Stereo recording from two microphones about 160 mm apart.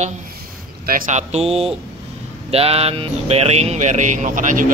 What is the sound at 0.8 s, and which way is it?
Speech, 60° right (ahead or behind).